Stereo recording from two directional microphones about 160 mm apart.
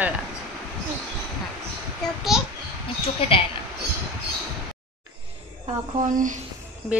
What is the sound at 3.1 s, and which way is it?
Speech, 35° left (ahead or behind).